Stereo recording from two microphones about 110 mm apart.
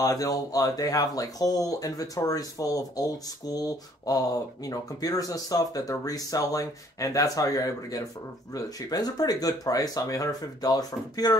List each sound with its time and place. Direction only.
0.0 s speech: 35° left (ahead or behind)